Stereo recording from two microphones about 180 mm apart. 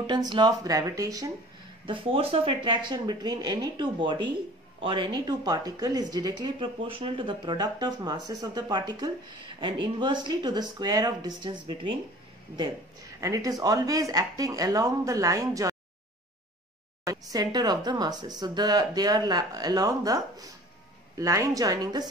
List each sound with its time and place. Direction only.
0.0 s speech: 25° right (ahead or behind)
1.9 s speech: 30° right (ahead or behind)
13.2 s speech: 20° right (ahead or behind)
17.0 s speech: 20° right (ahead or behind)